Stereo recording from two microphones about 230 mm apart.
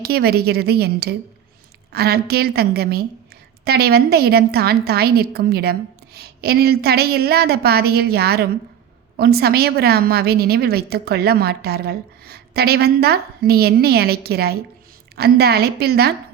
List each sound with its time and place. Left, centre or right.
0.0 s a woman's voice: right